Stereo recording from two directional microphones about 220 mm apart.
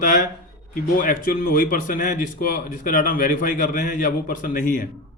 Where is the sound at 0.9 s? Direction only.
40° left (ahead or behind).